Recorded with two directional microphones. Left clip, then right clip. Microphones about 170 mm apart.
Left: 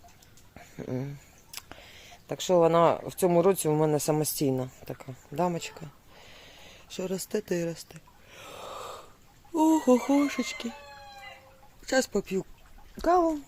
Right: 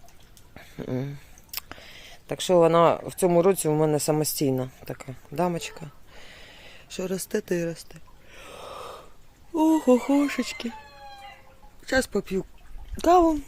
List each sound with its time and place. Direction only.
0.5 s a sound: 25° right (ahead or behind)
9.5 s speech: 10° right (ahead or behind)
11.9 s speech: 15° right (ahead or behind)
13.0 s a child's voice: 45° right (ahead or behind)